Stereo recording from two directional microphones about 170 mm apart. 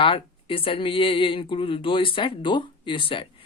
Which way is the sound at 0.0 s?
30° left (ahead or behind).